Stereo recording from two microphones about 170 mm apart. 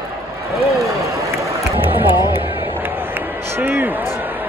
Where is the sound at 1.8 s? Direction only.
10° right (ahead or behind).